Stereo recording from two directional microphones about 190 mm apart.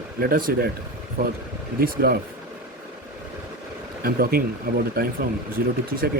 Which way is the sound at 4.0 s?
50° right (ahead or behind).